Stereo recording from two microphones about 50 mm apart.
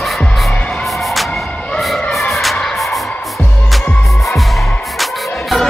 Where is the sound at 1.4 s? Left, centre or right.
Left.